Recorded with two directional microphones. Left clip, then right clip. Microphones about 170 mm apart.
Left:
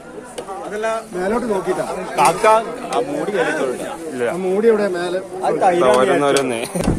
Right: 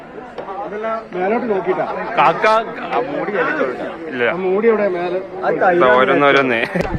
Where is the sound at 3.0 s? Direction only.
90° left.